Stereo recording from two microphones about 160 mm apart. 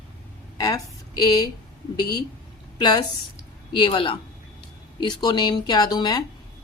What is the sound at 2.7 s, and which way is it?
A woman's voice, 25° left (ahead or behind).